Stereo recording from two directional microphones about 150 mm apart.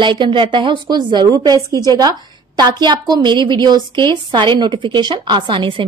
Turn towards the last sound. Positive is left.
turn(degrees=-35)  # may be behind; listen again after turning